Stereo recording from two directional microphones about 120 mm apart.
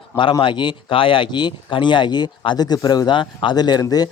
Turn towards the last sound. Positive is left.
turn(degrees=35)  # may be behind; listen again after turning